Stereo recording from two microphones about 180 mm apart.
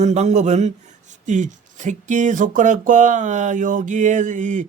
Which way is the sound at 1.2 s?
45° right (ahead or behind).